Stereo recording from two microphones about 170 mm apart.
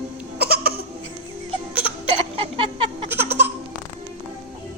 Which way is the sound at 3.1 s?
10° right (ahead or behind).